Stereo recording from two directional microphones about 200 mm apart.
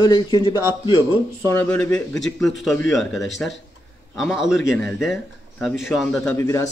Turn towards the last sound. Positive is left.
turn(degrees=15)  # may be behind; listen again after turning